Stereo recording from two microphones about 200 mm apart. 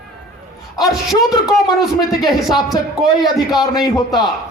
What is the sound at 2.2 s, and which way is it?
Speech, 20° left (ahead or behind).